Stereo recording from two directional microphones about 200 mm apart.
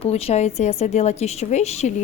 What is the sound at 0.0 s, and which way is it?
A woman's voice, 30° left (ahead or behind).